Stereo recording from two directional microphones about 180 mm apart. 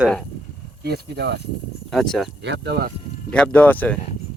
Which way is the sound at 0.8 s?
65° right (ahead or behind).